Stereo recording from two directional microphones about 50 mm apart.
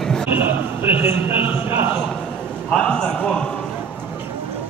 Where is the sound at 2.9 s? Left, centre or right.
Centre.